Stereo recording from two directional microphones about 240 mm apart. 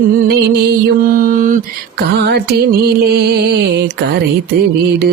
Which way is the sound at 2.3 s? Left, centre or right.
Right.